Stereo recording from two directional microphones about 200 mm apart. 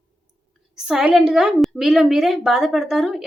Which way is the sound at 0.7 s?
5° right (ahead or behind).